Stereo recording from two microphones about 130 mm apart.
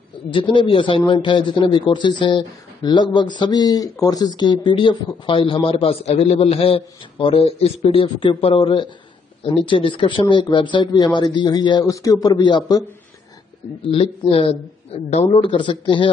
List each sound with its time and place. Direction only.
0.3 s a man's voice: 40° left (ahead or behind)
13.8 s speech: 45° left (ahead or behind)
15.2 s a man's voice: 40° left (ahead or behind)